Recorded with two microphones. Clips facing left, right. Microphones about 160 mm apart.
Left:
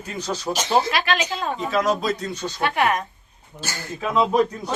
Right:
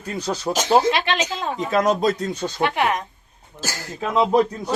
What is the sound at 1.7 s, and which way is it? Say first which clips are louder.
Speech: right 4 dB; 50° right (ahead or behind).